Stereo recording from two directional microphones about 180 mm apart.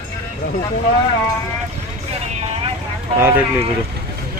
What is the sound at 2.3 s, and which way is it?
Vehicle, 40° right (ahead or behind).